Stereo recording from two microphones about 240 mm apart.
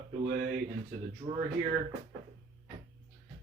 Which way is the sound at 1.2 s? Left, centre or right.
Right.